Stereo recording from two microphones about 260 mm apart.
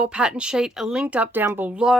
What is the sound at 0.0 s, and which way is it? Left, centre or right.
Speech, centre.